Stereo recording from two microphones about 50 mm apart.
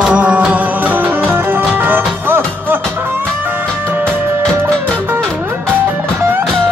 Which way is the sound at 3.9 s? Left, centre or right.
Right.